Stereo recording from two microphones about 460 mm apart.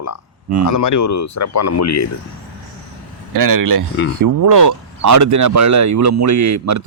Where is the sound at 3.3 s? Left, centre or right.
Right.